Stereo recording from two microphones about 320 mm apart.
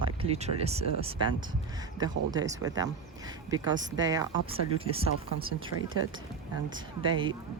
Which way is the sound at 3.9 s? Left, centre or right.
Centre.